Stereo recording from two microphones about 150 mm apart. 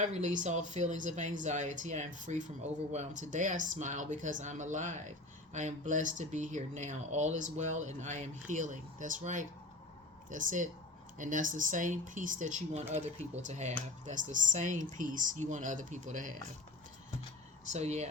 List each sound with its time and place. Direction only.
0.0 s speech: 55° right (ahead or behind)
17.7 s speech: 50° right (ahead or behind)